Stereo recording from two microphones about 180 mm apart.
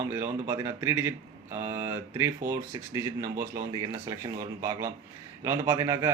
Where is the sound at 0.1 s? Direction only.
15° right (ahead or behind).